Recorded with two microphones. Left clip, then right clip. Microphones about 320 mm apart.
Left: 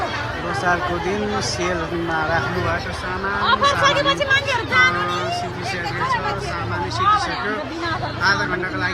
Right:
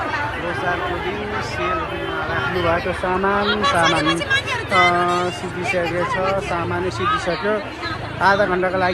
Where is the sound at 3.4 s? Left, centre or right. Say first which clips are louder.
Left 5 dB; left.